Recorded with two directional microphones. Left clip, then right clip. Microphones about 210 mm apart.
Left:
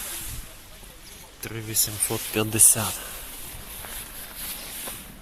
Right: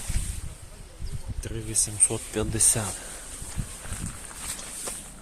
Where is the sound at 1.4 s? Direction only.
10° left (ahead or behind).